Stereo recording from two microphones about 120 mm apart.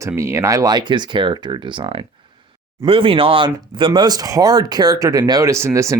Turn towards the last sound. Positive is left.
turn(degrees=-25)  # may be behind; listen again after turning